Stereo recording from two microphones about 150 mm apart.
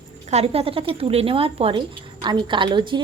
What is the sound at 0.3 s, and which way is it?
Speech, 45° right (ahead or behind).